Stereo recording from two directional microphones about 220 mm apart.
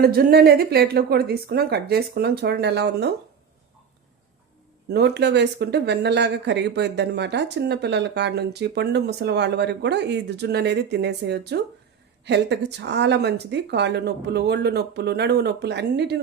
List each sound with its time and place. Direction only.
0.0 s speech: 45° right (ahead or behind)
4.9 s speech: 50° right (ahead or behind)